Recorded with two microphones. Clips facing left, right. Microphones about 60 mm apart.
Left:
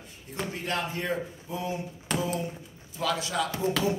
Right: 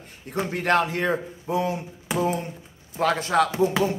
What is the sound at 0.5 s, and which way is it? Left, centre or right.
Speech, right.